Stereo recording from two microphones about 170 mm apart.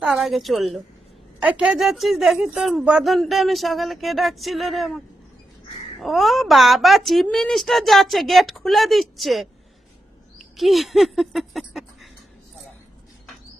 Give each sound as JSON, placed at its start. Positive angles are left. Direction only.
{"t": 0.0, "sound": "speech", "side_deg": -5}
{"t": 10.3, "sound": "bird", "side_deg": 0}